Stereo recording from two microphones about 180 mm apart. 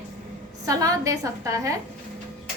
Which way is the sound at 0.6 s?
20° right (ahead or behind).